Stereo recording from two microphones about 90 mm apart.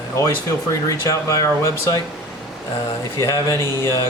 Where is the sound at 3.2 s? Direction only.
35° left (ahead or behind).